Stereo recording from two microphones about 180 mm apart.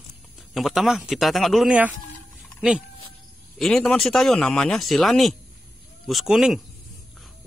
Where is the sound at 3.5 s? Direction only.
5° left (ahead or behind).